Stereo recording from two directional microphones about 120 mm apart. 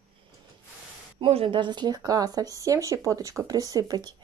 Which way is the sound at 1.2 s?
50° right (ahead or behind).